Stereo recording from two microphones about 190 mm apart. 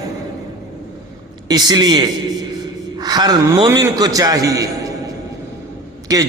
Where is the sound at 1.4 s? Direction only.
20° right (ahead or behind).